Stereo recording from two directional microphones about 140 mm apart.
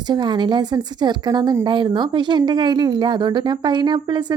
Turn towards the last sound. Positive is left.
turn(degrees=-30)  # may be behind; listen again after turning